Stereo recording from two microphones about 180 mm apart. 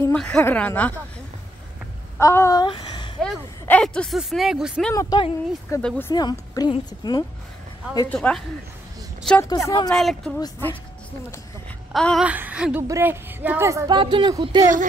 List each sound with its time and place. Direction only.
0.0 s a woman's voice: 5° left (ahead or behind)
2.1 s speech: 15° left (ahead or behind)
3.2 s speech: 5° left (ahead or behind)
4.9 s a woman's voice: 20° left (ahead or behind)
5.8 s a woman's voice: 10° left (ahead or behind)
6.1 s a woman's voice: 20° left (ahead or behind)
8.1 s a woman's voice: 5° left (ahead or behind)
11.9 s speech: centre (ahead or behind)
12.3 s speech: 10° right (ahead or behind)
13.9 s speech: 25° right (ahead or behind)